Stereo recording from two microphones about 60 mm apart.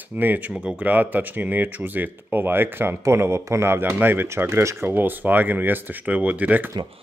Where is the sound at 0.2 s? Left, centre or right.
Right.